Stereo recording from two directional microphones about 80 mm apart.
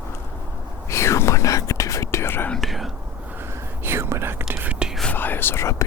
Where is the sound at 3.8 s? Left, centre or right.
Right.